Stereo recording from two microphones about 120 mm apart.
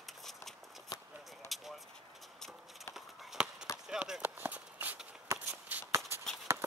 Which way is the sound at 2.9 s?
5° right (ahead or behind).